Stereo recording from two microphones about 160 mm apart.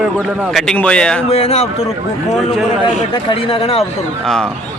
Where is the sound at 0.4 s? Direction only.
Centre (ahead or behind).